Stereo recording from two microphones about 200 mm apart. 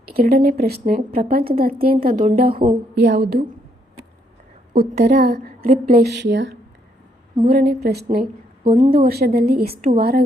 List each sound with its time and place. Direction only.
0.1 s a woman's voice: 50° right (ahead or behind)
2.9 s a woman's voice: 60° right (ahead or behind)
4.9 s a woman's voice: 35° right (ahead or behind)
5.2 s a woman's voice: 50° right (ahead or behind)
7.4 s a woman's voice: 50° right (ahead or behind)